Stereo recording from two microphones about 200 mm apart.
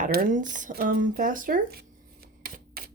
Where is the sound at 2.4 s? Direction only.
50° right (ahead or behind).